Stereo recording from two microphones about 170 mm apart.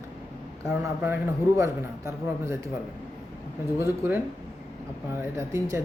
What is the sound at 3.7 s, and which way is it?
Speech, 15° right (ahead or behind).